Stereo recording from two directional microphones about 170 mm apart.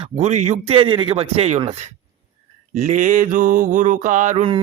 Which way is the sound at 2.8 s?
50° right (ahead or behind).